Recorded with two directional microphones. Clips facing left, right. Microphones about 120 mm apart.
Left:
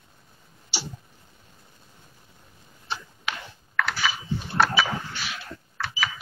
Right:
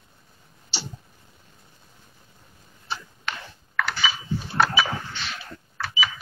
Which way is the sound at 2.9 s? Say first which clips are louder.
Even; centre (ahead or behind).